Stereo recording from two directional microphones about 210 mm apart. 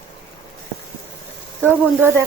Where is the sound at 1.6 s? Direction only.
10° right (ahead or behind).